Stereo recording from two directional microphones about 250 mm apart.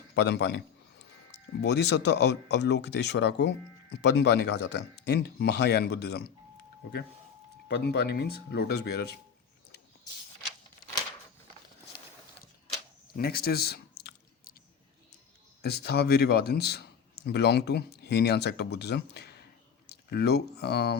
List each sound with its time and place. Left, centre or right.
0.1 s a sound: left
1.6 s speech: left
7.7 s speech: left
13.1 s speech: left
15.6 s speech: left